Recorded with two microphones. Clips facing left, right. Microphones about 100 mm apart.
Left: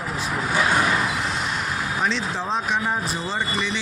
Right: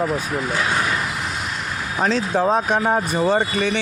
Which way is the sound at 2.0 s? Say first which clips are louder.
Right 10 dB; 45° right (ahead or behind).